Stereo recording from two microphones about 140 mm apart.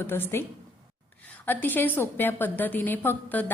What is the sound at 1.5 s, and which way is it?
A woman's voice, 15° left (ahead or behind).